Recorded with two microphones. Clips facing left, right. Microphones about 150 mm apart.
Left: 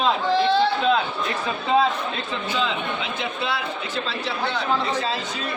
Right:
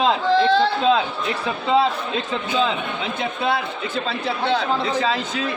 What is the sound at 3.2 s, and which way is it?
Speech, 50° right (ahead or behind).